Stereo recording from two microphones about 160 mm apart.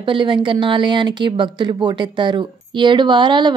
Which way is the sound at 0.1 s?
30° right (ahead or behind).